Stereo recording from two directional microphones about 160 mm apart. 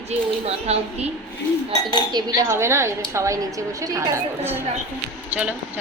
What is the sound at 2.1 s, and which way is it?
A woman's voice, 20° right (ahead or behind).